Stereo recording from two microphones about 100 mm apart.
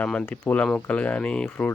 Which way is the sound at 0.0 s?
10° left (ahead or behind).